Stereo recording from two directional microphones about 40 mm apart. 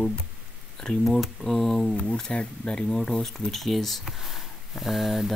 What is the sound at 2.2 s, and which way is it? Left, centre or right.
Speech, centre.